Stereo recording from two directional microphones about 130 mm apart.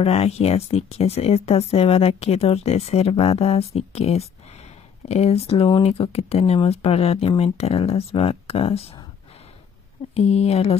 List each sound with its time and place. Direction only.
0.0 s speech: 50° left (ahead or behind)
10.1 s speech: 55° left (ahead or behind)